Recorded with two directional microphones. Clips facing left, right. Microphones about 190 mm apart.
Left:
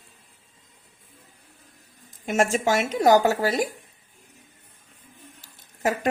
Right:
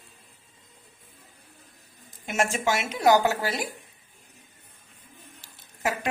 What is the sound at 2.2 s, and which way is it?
Speech, 45° left (ahead or behind).